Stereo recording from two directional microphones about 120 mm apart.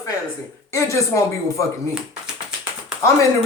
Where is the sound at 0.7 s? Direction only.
25° left (ahead or behind).